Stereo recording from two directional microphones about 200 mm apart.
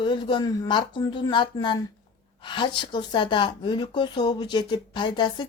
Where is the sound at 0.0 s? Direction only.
25° left (ahead or behind).